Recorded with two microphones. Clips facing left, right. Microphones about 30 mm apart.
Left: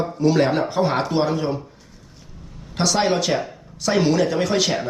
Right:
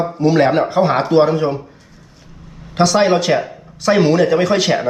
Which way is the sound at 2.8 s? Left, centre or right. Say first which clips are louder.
Right 6 dB; centre.